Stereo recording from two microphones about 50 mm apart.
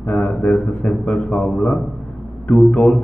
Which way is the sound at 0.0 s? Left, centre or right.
Left.